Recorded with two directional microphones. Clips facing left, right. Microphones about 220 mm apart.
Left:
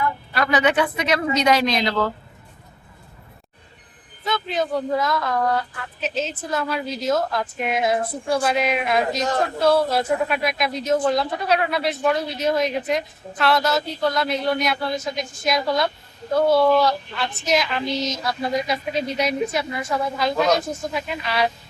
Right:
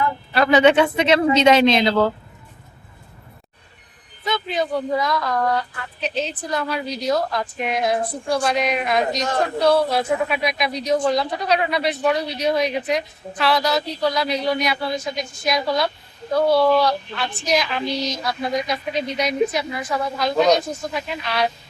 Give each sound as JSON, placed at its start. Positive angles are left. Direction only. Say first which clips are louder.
{"t": 0.3, "sound": "speech", "louder": "right 6 dB", "side_deg": -25}
{"t": 4.2, "sound": "speech", "louder": "right 1 dB", "side_deg": 0}